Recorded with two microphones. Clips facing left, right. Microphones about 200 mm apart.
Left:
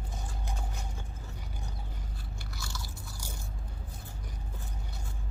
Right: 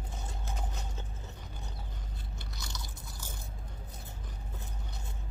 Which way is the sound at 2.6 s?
20° right (ahead or behind).